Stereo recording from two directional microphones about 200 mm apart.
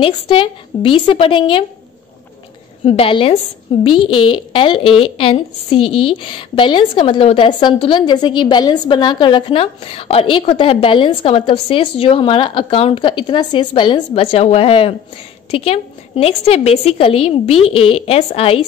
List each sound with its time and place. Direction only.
0.0 s a woman's voice: 25° left (ahead or behind)
2.8 s a woman's voice: 30° left (ahead or behind)